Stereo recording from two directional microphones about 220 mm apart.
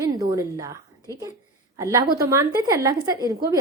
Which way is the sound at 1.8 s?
15° right (ahead or behind).